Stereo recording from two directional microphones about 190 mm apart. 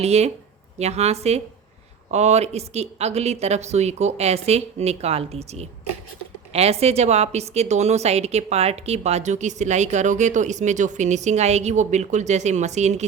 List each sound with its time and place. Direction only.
0.0 s a woman's voice: 35° right (ahead or behind)